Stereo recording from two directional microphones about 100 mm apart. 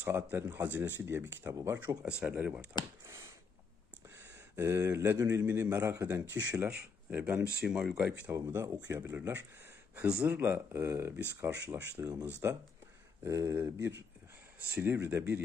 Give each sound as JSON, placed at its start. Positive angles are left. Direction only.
{"t": 0.0, "sound": "speech", "side_deg": -20}
{"t": 2.0, "sound": "speech", "side_deg": -10}
{"t": 3.1, "sound": "a sound", "side_deg": -30}
{"t": 5.3, "sound": "speech", "side_deg": -25}
{"t": 8.3, "sound": "speech", "side_deg": -25}
{"t": 15.0, "sound": "speech", "side_deg": -20}